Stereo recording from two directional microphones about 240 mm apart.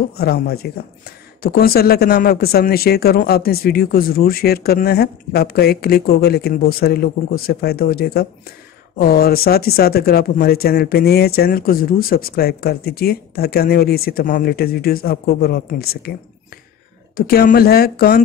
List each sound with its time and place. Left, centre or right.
0.2 s speech: left
17.3 s speech: left